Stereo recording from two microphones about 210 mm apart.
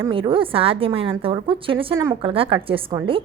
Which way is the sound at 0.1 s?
25° right (ahead or behind).